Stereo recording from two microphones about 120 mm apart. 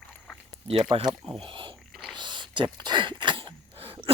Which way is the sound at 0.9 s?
50° right (ahead or behind).